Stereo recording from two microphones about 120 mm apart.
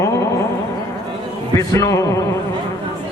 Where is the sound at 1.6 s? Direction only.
25° left (ahead or behind).